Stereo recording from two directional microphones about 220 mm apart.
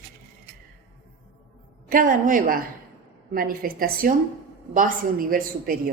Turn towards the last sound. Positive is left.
turn(degrees=-40)  # may be behind; listen again after turning